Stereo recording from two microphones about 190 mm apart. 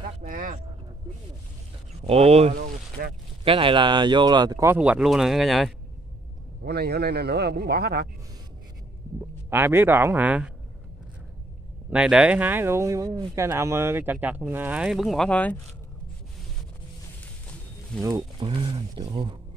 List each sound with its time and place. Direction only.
0.2 s a sound: 45° right (ahead or behind)
2.0 s speech: 30° right (ahead or behind)
2.5 s speech: 50° right (ahead or behind)
3.4 s speech: 25° right (ahead or behind)
4.7 s speech: 5° right (ahead or behind)
6.6 s a man's voice: 55° right (ahead or behind)
9.5 s speech: 10° right (ahead or behind)
11.9 s speech: 5° right (ahead or behind)
18.0 s speech: 20° right (ahead or behind)